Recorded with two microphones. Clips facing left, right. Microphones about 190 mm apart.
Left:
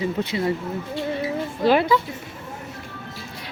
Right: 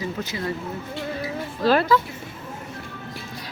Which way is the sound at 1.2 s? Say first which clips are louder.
Left 1 dB; 15° left (ahead or behind).